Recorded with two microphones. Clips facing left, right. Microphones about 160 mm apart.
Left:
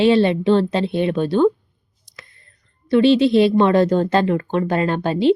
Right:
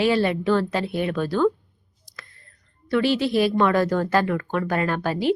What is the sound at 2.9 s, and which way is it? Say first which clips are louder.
A woman's voice: left 7 dB; 25° left (ahead or behind).